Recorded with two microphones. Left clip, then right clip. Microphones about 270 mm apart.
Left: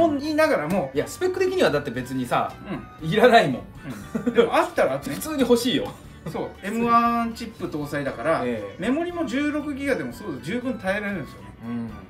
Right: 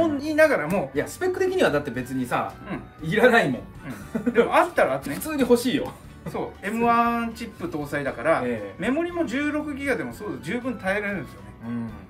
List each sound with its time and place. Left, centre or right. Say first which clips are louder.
0.0 s speech: right 1 dB; centre